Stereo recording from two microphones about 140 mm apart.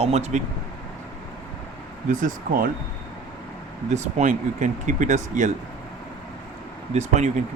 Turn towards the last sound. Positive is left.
turn(degrees=-55)  # may be behind; listen again after turning